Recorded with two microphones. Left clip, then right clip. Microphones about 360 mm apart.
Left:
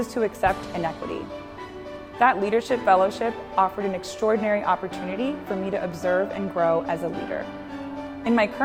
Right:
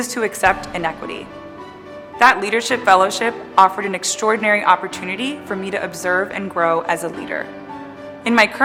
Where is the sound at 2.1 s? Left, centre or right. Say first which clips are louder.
Right 6 dB; left.